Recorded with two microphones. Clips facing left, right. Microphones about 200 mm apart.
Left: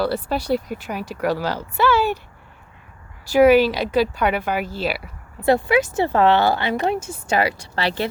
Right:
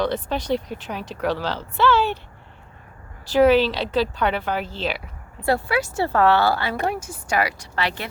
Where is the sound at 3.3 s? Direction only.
10° left (ahead or behind).